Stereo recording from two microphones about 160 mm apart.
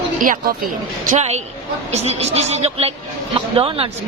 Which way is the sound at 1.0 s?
45° right (ahead or behind).